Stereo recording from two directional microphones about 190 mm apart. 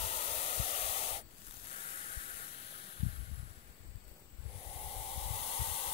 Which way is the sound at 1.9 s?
30° left (ahead or behind).